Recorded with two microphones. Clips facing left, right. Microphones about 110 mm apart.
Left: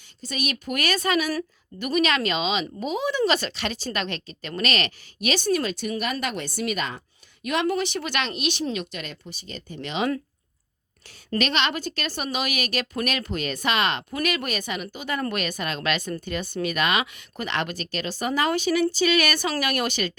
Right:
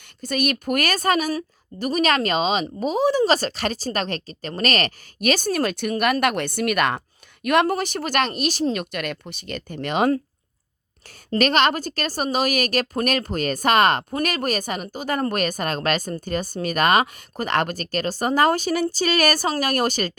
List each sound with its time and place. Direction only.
0.2 s a woman's voice: 50° right (ahead or behind)
11.3 s a woman's voice: 45° right (ahead or behind)